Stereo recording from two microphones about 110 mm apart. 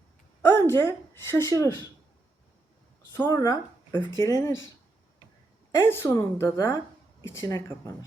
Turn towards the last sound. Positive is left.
turn(degrees=30)  # may be behind; listen again after turning